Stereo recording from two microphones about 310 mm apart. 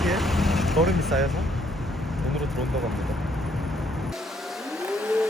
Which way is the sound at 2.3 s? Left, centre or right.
Centre.